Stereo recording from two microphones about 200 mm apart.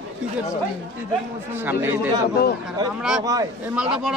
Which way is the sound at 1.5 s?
10° right (ahead or behind).